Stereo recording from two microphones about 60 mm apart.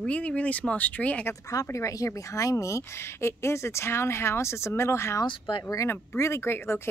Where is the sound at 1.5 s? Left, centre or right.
Left.